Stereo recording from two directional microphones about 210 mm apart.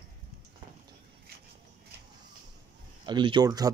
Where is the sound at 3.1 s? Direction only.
20° right (ahead or behind).